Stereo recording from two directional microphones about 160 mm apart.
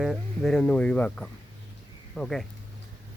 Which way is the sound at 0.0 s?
Centre (ahead or behind).